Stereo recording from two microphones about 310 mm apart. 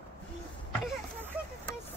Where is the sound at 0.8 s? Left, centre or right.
Centre.